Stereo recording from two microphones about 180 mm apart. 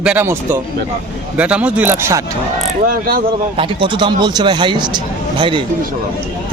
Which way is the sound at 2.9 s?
55° right (ahead or behind).